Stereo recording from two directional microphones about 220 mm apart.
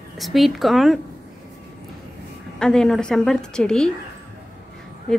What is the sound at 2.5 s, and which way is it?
A woman's voice, 5° left (ahead or behind).